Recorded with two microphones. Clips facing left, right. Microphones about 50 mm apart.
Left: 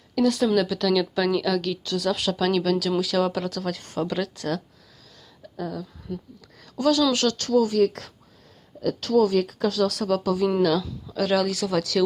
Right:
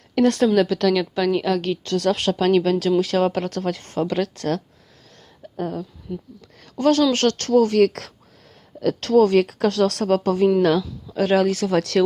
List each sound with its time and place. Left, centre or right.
0.1 s a woman's voice: right
0.5 s speech: right
1.3 s speech: right
1.8 s speech: right
6.1 s speech: centre
6.6 s speech: right
8.8 s speech: right
10.8 s speech: right
11.8 s speech: right